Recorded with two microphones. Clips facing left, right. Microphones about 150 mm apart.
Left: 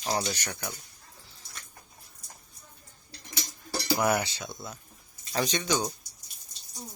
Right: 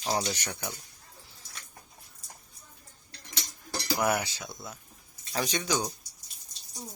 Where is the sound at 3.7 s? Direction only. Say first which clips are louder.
Left 2 dB; 5° left (ahead or behind).